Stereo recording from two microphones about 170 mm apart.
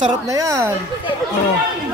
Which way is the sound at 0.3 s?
20° right (ahead or behind).